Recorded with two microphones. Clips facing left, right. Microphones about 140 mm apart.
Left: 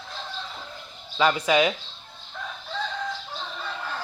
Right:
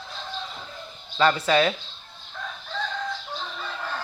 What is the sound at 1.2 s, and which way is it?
Speech, 10° left (ahead or behind).